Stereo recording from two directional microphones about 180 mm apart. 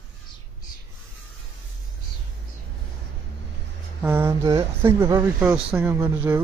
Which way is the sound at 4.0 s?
10° right (ahead or behind).